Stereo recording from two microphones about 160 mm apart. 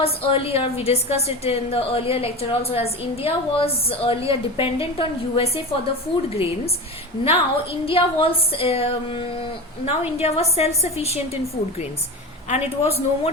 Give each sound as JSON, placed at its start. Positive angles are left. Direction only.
{"t": 0.0, "sound": "a woman's voice", "side_deg": 35}
{"t": 7.3, "sound": "a woman's voice", "side_deg": 35}
{"t": 12.5, "sound": "a woman's voice", "side_deg": 40}